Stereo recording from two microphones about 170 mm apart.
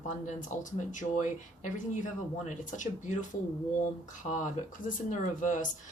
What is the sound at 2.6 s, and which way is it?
Speech, 50° left (ahead or behind).